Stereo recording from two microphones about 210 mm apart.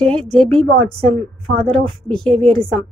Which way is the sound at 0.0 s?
5° left (ahead or behind).